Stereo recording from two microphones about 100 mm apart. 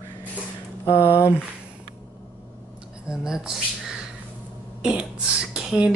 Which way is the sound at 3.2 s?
5° right (ahead or behind).